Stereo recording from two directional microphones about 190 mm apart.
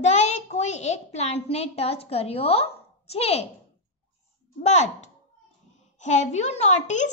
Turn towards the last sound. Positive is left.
turn(degrees=40)  # may be behind; listen again after turning